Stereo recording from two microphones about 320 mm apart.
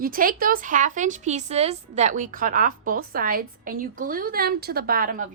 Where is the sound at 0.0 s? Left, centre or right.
Right.